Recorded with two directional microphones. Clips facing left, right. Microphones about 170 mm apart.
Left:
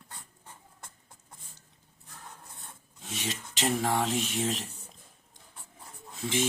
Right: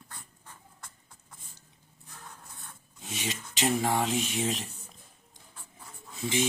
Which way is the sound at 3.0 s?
Centre (ahead or behind).